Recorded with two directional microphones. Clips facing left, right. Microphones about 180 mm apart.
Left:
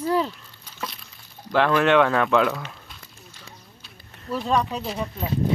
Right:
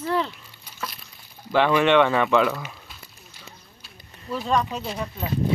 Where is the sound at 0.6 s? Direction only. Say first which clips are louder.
Left 1 dB; 5° right (ahead or behind).